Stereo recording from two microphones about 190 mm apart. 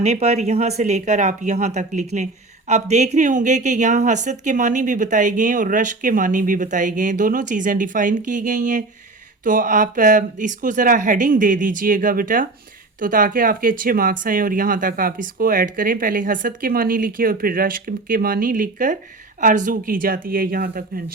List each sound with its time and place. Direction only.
0.0 s speech: 35° right (ahead or behind); by 21.0 s 50° right (ahead or behind)